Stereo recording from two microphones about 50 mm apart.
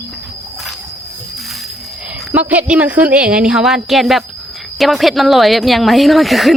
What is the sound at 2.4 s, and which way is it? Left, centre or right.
Speech, right.